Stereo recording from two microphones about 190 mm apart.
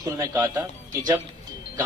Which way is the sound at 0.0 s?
20° right (ahead or behind).